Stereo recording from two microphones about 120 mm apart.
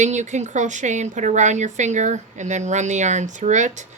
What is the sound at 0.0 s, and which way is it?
Speech, 85° right.